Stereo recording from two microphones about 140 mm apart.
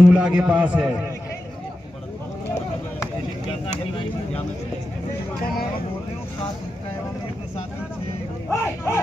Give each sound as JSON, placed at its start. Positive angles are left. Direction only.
{"t": 0.1, "sound": "a man's voice", "side_deg": -10}
{"t": 8.5, "sound": "speech", "side_deg": 15}